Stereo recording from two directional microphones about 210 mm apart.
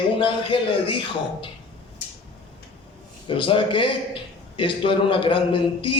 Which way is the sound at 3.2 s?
25° left (ahead or behind).